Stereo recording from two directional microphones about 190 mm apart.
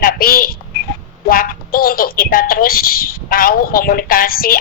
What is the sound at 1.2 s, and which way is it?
A woman's voice, 50° left (ahead or behind).